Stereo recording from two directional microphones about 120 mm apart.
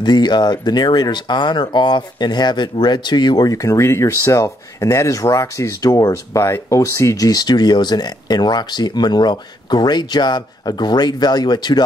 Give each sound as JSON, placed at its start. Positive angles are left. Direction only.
{"t": 0.0, "sound": "speech", "side_deg": 35}